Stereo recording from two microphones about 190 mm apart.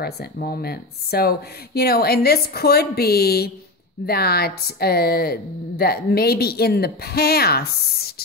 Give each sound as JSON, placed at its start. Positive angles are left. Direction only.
{"t": 0.0, "sound": "a woman's voice", "side_deg": 55}